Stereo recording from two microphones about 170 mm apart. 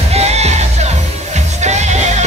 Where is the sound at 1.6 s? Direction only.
40° right (ahead or behind).